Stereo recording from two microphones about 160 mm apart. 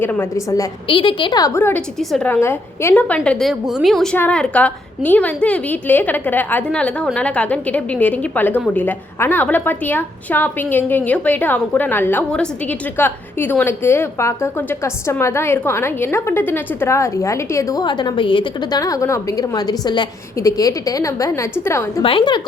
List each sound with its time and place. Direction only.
0.0 s a woman's voice: 15° left (ahead or behind)
0.9 s a woman's voice: 30° left (ahead or behind); by 3.2 s 10° left (ahead or behind)
3.2 s a woman's voice: centre (ahead or behind); by 22.0 s 15° left (ahead or behind)
22.0 s a woman's voice: 30° left (ahead or behind)